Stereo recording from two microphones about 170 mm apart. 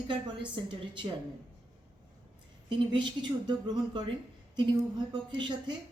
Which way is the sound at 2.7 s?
30° right (ahead or behind).